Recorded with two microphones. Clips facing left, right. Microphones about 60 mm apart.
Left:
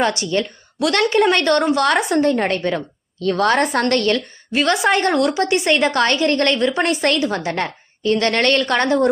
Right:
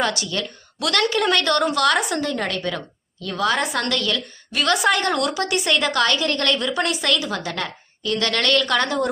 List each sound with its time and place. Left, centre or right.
0.0 s a woman's voice: left
3.2 s a woman's voice: left
4.5 s a woman's voice: left